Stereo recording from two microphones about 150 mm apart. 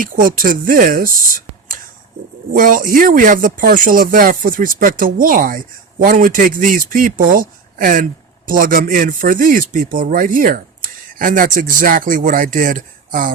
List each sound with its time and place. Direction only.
0.0 s speech: 65° right (ahead or behind)
2.5 s speech: 65° right (ahead or behind)